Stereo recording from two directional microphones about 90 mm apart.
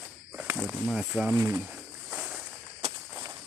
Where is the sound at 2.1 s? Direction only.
10° right (ahead or behind).